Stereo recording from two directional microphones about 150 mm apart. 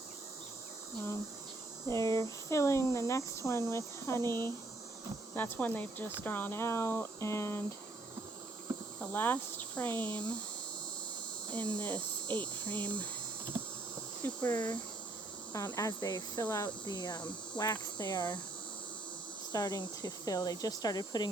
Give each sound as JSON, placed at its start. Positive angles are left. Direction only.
{"t": 1.9, "sound": "speech", "side_deg": 20}
{"t": 9.0, "sound": "speech", "side_deg": 10}
{"t": 11.5, "sound": "speech", "side_deg": 10}
{"t": 14.2, "sound": "speech", "side_deg": 10}
{"t": 15.5, "sound": "speech", "side_deg": 25}
{"t": 19.5, "sound": "speech", "side_deg": 25}